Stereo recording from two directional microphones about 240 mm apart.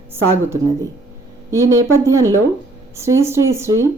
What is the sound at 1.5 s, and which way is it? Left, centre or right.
Speech, centre.